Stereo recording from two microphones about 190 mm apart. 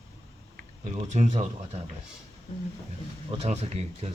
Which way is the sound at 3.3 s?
35° right (ahead or behind).